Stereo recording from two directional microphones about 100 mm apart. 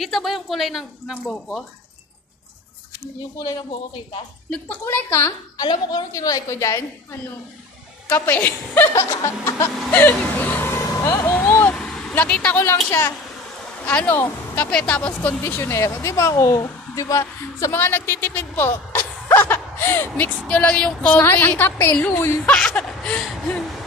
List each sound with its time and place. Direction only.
0.0 s speech: centre (ahead or behind)
4.5 s speech: 15° left (ahead or behind)
5.6 s a woman's voice: 45° left (ahead or behind)
6.1 s a woman's voice: 35° left (ahead or behind)
9.8 s speech: 15° left (ahead or behind)
10.8 s vehicle: 35° left (ahead or behind)
11.1 s speech: 25° left (ahead or behind)
11.3 s vehicle: 15° left (ahead or behind)
13.8 s speech: 15° left (ahead or behind)
20.4 s speech: 10° left (ahead or behind)
22.5 s speech: 10° left (ahead or behind)
23.3 s a sound: 5° left (ahead or behind)